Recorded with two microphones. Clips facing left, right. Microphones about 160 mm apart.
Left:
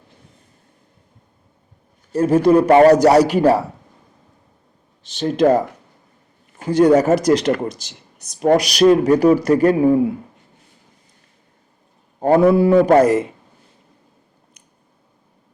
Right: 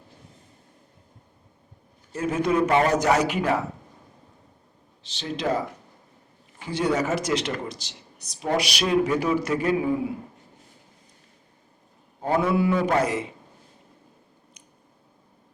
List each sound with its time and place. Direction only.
2.1 s speech: 35° left (ahead or behind)
5.0 s speech: 50° left (ahead or behind)
12.4 s speech: 40° left (ahead or behind)